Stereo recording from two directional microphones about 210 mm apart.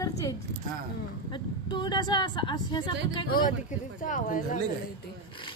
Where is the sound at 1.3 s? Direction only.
20° left (ahead or behind).